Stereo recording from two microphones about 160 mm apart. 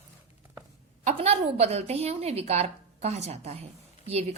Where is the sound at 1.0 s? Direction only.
40° right (ahead or behind).